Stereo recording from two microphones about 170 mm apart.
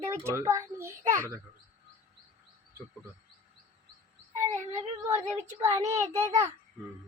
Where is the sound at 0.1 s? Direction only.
15° right (ahead or behind).